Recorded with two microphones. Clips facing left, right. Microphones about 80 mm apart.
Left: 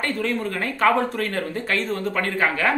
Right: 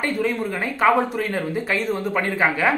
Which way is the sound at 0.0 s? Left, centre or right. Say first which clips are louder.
Right 2 dB; centre.